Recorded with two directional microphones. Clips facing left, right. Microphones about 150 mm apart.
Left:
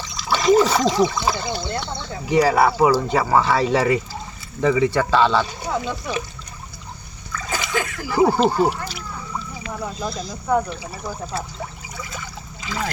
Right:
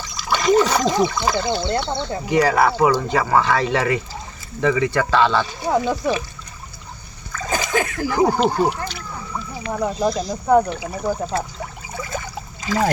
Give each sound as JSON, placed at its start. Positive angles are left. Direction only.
{"t": 0.2, "sound": "speech", "side_deg": 0}
{"t": 1.5, "sound": "speech", "side_deg": -25}
{"t": 2.3, "sound": "speech", "side_deg": 5}
{"t": 5.6, "sound": "speech", "side_deg": -40}
{"t": 7.3, "sound": "splash", "side_deg": -45}
{"t": 8.3, "sound": "speech", "side_deg": 5}
{"t": 9.6, "sound": "speech", "side_deg": -40}
{"t": 12.1, "sound": "a sound", "side_deg": -45}